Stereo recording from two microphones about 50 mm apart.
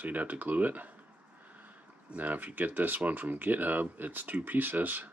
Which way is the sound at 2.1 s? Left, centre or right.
Right.